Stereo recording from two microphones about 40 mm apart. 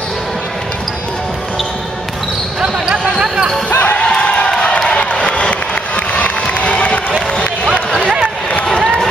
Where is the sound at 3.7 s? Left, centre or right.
Left.